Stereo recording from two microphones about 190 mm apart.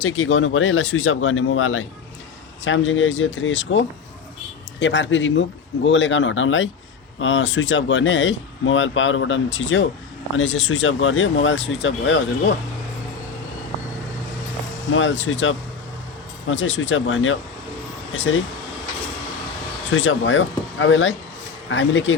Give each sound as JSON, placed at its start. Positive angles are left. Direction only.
{"t": 0.0, "sound": "speech", "side_deg": 90}
{"t": 14.9, "sound": "speech", "side_deg": 85}
{"t": 16.5, "sound": "speech", "side_deg": 80}
{"t": 19.9, "sound": "speech", "side_deg": 90}